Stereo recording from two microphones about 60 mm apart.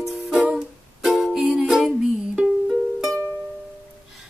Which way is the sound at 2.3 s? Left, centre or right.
Centre.